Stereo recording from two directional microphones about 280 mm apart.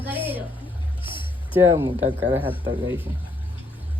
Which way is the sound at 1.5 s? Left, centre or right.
Centre.